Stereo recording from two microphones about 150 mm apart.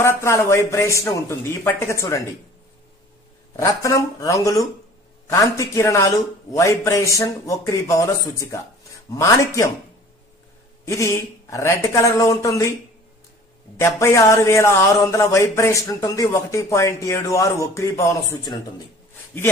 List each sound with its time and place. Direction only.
0.0 s speech: 15° left (ahead or behind)
3.5 s speech: 20° left (ahead or behind)
10.8 s speech: 20° left (ahead or behind)
13.7 s speech: 20° left (ahead or behind)